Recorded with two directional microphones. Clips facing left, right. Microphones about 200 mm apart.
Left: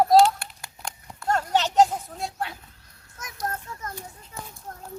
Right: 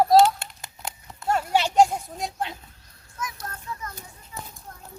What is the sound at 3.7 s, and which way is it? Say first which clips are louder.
Children playing: right 1 dB; 45° left (ahead or behind).